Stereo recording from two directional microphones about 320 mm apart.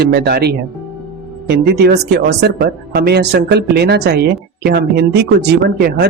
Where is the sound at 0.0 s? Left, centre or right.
Right.